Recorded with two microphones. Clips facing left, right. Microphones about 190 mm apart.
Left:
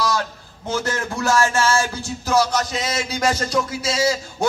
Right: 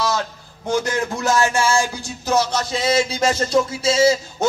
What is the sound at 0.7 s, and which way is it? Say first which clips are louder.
Music: right 3 dB; 15° right (ahead or behind).